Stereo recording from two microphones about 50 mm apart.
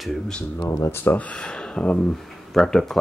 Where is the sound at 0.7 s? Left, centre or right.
Left.